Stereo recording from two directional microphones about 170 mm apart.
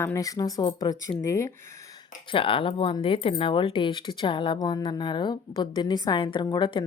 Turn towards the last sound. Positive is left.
turn(degrees=30)  # may be behind; listen again after turning